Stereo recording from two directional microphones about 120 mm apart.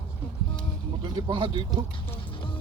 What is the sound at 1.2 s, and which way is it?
Speech, 45° right (ahead or behind).